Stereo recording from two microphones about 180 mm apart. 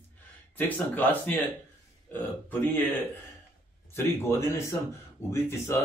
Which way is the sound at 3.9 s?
15° left (ahead or behind).